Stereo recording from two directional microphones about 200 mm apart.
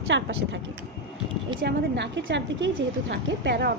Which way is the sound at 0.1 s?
65° right (ahead or behind).